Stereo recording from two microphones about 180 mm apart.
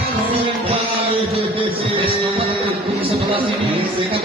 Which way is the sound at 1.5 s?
30° right (ahead or behind).